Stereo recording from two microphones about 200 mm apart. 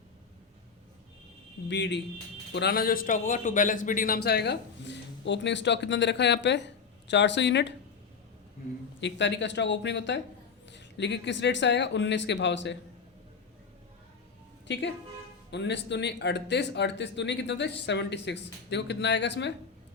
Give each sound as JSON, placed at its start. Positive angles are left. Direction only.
{"t": 1.6, "sound": "a man's voice", "side_deg": 60}
{"t": 9.0, "sound": "a man's voice", "side_deg": 60}
{"t": 15.4, "sound": "a man's voice", "side_deg": 60}